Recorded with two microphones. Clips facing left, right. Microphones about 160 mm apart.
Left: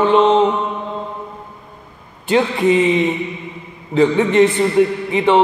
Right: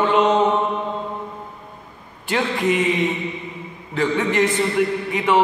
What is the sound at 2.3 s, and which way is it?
Speech, 25° left (ahead or behind).